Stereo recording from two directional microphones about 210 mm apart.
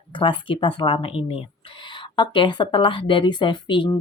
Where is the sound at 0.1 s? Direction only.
25° left (ahead or behind).